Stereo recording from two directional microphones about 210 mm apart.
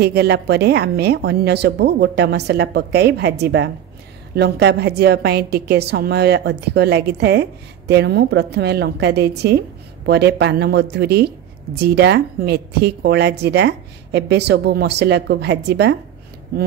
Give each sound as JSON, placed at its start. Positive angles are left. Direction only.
{"t": 0.0, "sound": "a woman's voice", "side_deg": -50}